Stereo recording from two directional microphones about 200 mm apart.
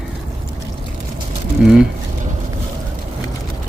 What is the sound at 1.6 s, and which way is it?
Speech, 5° right (ahead or behind).